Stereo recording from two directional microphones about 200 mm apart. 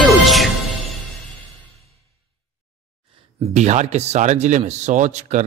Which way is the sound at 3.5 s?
35° right (ahead or behind).